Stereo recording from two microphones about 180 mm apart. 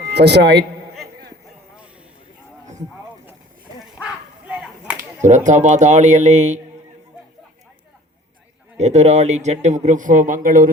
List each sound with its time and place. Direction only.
0.1 s a man's voice: 70° right (ahead or behind)
3.9 s whip: 5° right (ahead or behind)
4.9 s speech: 45° right (ahead or behind)
8.8 s speech: 40° right (ahead or behind)